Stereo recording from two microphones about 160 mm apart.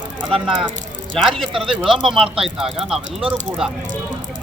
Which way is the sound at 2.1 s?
35° right (ahead or behind).